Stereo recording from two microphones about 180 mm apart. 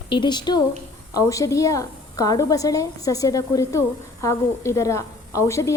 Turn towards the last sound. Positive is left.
turn(degrees=15)  # may be behind; listen again after turning